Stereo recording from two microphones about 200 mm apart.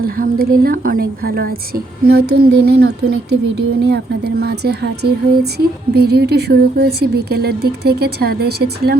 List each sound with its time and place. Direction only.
0.0 s a woman's voice: 50° right (ahead or behind)